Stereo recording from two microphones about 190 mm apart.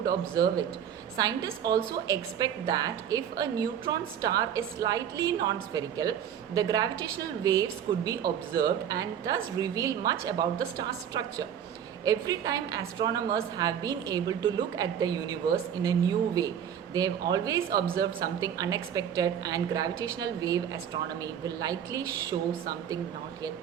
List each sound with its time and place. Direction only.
0.0 s a woman's voice: 20° right (ahead or behind)